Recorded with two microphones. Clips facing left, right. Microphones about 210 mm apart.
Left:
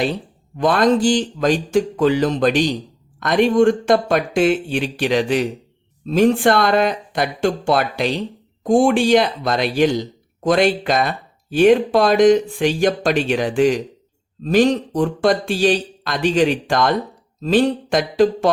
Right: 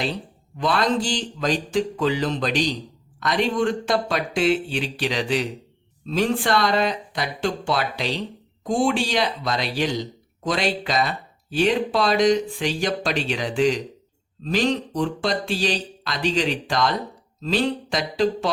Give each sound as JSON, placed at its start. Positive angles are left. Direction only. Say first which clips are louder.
{"t": 0.5, "sound": "speech", "louder": "left 6 dB", "side_deg": 50}